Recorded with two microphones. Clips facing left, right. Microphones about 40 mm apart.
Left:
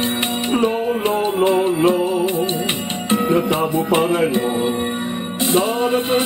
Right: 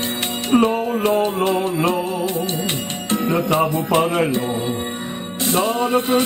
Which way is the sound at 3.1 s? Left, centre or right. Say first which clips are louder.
Left 1 dB; left.